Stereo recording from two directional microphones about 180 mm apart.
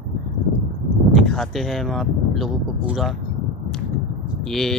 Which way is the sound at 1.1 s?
Centre (ahead or behind).